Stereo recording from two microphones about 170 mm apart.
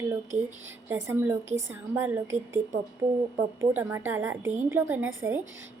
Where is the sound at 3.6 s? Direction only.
15° right (ahead or behind).